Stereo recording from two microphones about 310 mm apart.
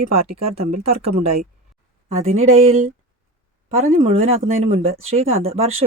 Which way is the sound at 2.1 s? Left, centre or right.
Centre.